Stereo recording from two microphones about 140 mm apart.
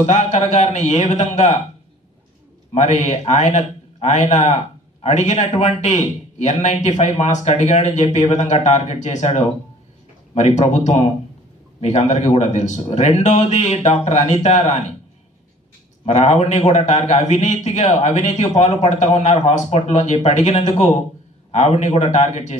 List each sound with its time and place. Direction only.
0.0 s a man's voice: 55° left (ahead or behind)
2.7 s a man's voice: 55° left (ahead or behind)
16.1 s a man's voice: 55° left (ahead or behind)